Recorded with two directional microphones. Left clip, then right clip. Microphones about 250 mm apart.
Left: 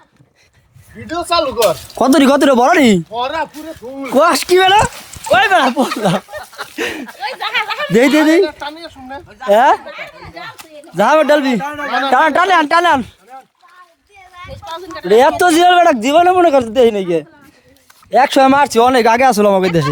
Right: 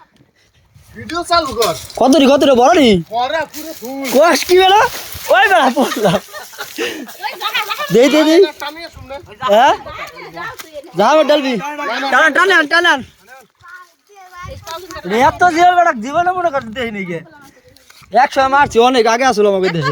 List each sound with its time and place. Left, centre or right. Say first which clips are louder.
1.0 s speech: right 3 dB; centre
1.5 s speech: left 3 dB; centre
2.0 s speech: right 1 dB; centre
4.1 s speech: right 1 dB; centre
7.3 s a sound: left 1 dB; centre
9.5 s speech: even; left
10.9 s speech: even; centre
14.6 s a sound: left 3 dB; right
15.0 s speech: left 2 dB; left